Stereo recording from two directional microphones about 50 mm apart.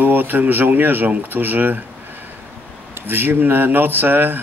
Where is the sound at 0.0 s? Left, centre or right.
Right.